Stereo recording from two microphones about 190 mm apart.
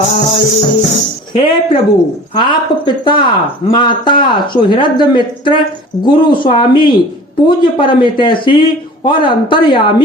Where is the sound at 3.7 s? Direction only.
25° left (ahead or behind).